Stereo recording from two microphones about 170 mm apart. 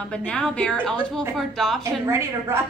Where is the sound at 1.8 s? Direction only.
15° right (ahead or behind).